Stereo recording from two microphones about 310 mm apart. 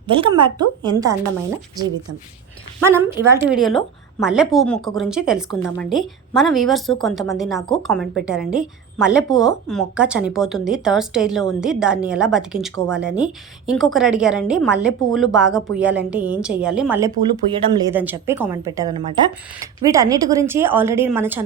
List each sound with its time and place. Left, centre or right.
0.1 s a woman's voice: centre